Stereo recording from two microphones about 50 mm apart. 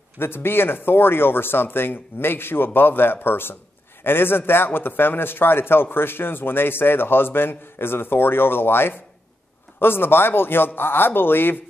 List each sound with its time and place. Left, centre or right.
0.2 s a man's voice: left